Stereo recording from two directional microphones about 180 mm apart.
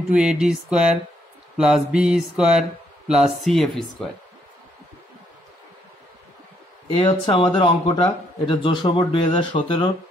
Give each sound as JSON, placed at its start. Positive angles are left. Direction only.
{"t": 0.1, "sound": "mantra", "side_deg": -5}
{"t": 6.9, "sound": "speech", "side_deg": 25}